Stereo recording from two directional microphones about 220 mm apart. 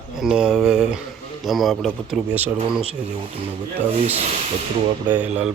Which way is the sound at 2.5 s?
25° right (ahead or behind).